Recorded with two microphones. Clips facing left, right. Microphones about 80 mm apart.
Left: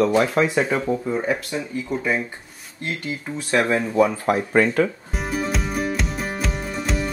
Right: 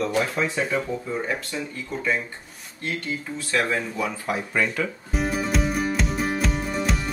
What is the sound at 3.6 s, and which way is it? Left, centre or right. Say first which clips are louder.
Speech: left 8 dB; left.